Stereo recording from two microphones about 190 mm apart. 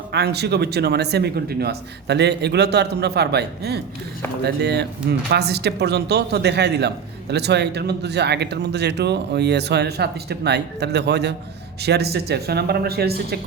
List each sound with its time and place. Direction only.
0.1 s speech: 60° right (ahead or behind)